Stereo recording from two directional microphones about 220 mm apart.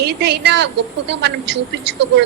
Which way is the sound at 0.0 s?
45° right (ahead or behind).